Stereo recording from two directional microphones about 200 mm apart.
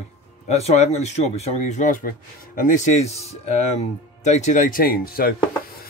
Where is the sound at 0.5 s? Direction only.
35° left (ahead or behind).